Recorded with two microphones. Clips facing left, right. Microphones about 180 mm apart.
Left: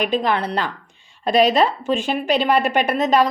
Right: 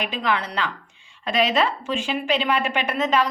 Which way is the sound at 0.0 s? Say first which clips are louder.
Left 5 dB; 40° left (ahead or behind).